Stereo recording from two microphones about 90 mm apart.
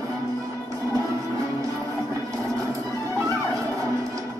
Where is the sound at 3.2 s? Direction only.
40° right (ahead or behind).